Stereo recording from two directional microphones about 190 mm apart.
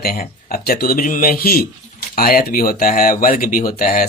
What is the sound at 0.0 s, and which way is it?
Speech, 50° left (ahead or behind).